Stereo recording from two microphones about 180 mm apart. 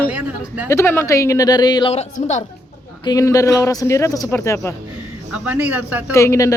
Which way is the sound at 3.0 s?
20° left (ahead or behind).